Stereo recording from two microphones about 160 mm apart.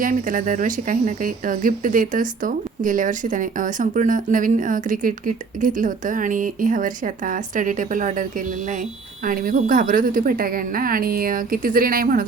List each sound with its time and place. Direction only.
0.0 s speech: 55° right (ahead or behind)